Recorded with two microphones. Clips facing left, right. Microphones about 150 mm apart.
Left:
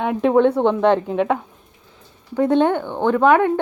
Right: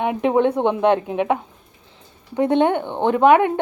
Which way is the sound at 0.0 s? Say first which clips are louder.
Left 2 dB; 15° right (ahead or behind).